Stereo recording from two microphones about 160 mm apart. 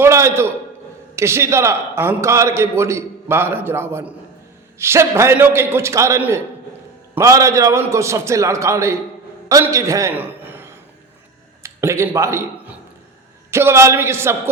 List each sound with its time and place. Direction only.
0.0 s a man's voice: 20° right (ahead or behind)